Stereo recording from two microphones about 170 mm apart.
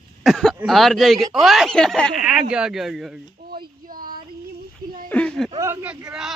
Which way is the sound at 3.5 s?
60° right (ahead or behind).